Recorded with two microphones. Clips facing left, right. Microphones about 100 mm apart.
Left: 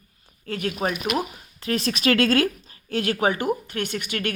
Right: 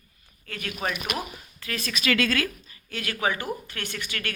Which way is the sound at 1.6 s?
30° left (ahead or behind).